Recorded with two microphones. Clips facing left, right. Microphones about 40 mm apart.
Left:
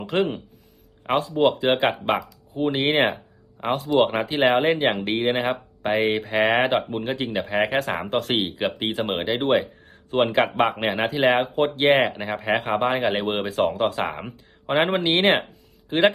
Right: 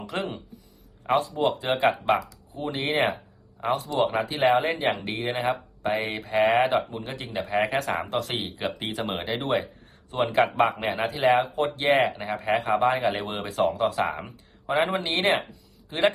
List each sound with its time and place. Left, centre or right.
0.0 s speech: left